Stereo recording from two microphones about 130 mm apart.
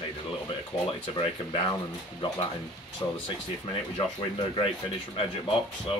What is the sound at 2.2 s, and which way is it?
Speech, 40° left (ahead or behind).